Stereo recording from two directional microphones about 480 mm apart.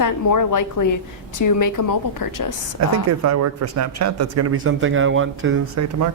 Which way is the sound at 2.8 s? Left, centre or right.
Right.